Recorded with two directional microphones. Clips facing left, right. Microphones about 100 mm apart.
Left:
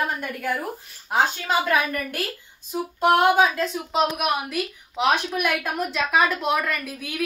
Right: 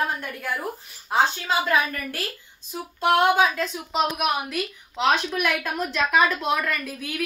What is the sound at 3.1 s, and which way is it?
A woman's voice, 5° left (ahead or behind).